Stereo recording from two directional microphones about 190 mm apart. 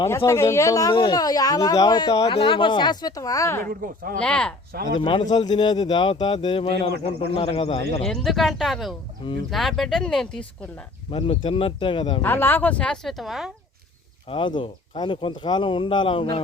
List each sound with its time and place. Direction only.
0.0 s speech: 15° left (ahead or behind)
3.7 s speech: 50° right (ahead or behind)
4.2 s speech: 5° left (ahead or behind)
4.9 s speech: 25° left (ahead or behind)
8.0 s speech: centre (ahead or behind)
11.1 s speech: 30° left (ahead or behind)
12.2 s speech: 10° left (ahead or behind)
14.3 s speech: 25° left (ahead or behind)